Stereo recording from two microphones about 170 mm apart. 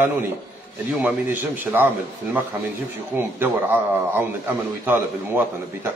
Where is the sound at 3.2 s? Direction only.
10° right (ahead or behind).